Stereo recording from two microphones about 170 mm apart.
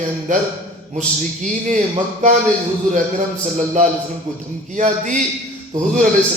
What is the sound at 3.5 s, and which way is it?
A man's voice, 45° right (ahead or behind).